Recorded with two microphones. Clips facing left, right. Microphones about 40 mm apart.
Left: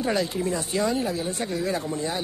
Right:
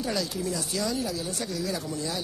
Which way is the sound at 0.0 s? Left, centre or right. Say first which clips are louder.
Left 5 dB; left.